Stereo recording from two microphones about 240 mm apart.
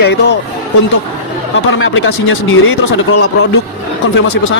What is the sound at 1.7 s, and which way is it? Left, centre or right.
Speech, left.